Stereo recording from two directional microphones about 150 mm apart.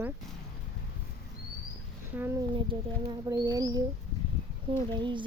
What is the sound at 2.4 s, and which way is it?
Speech, 30° right (ahead or behind).